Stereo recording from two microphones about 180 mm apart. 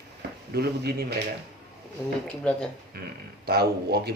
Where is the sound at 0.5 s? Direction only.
60° right (ahead or behind).